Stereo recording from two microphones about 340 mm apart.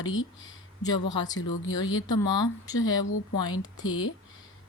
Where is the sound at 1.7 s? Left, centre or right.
Left.